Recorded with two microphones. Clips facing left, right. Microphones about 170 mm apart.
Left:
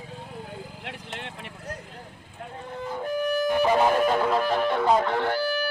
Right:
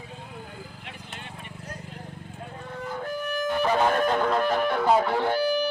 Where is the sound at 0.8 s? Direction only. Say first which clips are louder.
Left 4 dB; 80° left.